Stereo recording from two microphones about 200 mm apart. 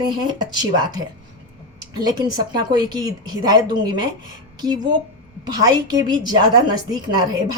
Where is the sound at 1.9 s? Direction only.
20° right (ahead or behind).